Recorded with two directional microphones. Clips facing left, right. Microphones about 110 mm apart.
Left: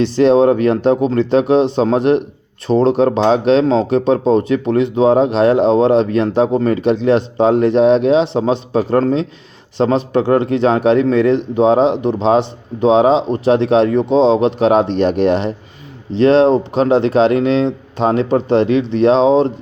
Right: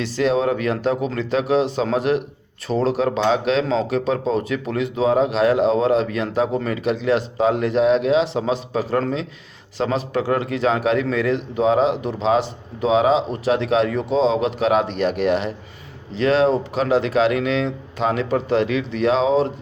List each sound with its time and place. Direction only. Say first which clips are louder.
0.0 s speech: left 9 dB; 30° left (ahead or behind)